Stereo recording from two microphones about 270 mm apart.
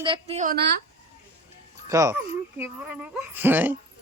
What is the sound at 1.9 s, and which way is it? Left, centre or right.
Speech, centre.